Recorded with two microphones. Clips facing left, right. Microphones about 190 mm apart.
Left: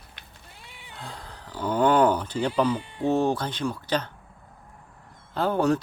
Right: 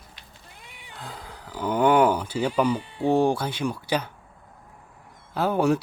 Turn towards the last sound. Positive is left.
turn(degrees=-10)  # may be behind; listen again after turning